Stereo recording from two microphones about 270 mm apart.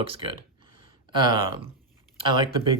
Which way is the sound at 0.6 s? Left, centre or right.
Centre.